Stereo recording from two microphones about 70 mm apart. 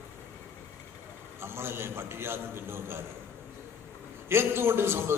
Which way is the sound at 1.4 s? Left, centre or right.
Right.